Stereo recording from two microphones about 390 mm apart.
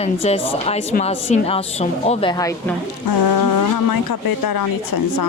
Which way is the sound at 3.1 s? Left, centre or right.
Left.